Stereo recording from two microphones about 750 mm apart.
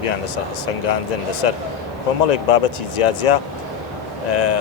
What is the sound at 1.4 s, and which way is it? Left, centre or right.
Speech, left.